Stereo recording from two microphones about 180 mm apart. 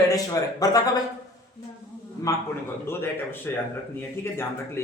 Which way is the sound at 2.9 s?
15° left (ahead or behind).